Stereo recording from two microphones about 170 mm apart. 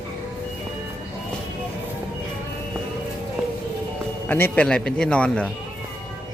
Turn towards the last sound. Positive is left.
turn(degrees=5)  # may be behind; listen again after turning